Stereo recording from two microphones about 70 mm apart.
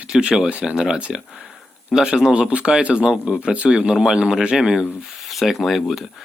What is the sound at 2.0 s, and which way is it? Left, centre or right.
Speech, centre.